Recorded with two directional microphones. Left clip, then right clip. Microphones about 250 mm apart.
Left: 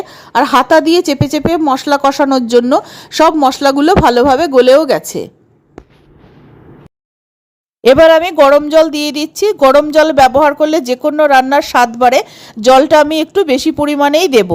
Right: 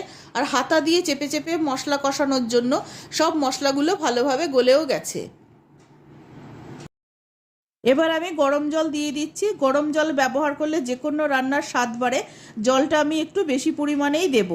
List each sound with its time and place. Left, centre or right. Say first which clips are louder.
0.1 s a woman's voice: left 13 dB; left
7.8 s a woman's voice: left 14 dB; left